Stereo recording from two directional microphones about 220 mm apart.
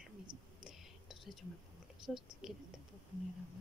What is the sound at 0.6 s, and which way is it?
Whispering, centre (ahead or behind).